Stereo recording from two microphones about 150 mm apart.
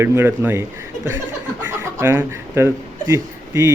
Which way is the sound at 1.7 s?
15° right (ahead or behind).